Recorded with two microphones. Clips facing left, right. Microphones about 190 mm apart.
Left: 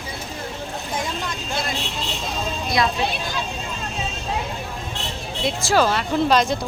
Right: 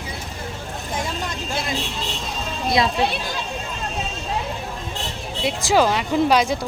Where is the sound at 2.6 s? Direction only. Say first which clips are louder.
Right 3 dB; 25° right (ahead or behind).